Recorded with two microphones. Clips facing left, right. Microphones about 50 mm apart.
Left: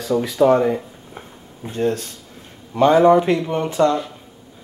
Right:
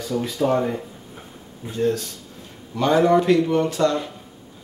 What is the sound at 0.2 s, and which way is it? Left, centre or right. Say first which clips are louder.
Speech: left 6 dB; left.